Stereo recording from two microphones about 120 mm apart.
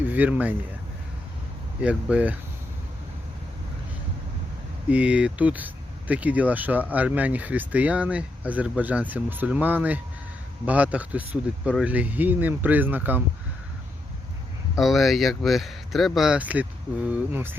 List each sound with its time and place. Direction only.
0.0 s speech: 15° right (ahead or behind)
1.8 s speech: 10° right (ahead or behind)
4.9 s speech: 10° right (ahead or behind)
14.8 s speech: centre (ahead or behind); by 17.6 s 15° right (ahead or behind)